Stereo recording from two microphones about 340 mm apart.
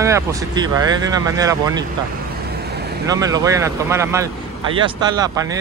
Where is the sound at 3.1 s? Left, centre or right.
Centre.